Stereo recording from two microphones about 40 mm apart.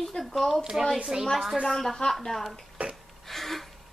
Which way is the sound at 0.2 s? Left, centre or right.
Centre.